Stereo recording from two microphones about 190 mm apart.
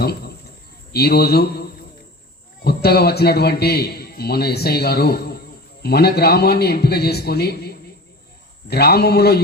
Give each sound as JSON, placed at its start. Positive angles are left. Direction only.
{"t": 0.9, "sound": "a man's voice", "side_deg": 55}
{"t": 2.6, "sound": "a man's voice", "side_deg": 55}